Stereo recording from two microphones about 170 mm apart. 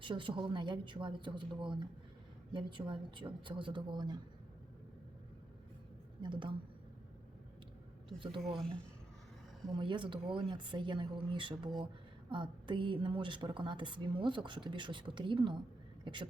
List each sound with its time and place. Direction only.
0.0 s a woman's voice: 30° right (ahead or behind)
6.2 s a woman's voice: 30° right (ahead or behind)
8.2 s a woman's voice: 30° right (ahead or behind)
9.6 s a woman's voice: 30° right (ahead or behind)